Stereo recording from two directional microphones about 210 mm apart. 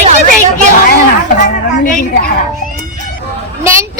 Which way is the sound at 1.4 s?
40° left (ahead or behind).